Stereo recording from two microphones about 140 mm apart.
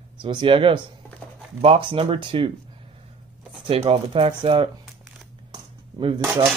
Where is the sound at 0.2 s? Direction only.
35° right (ahead or behind).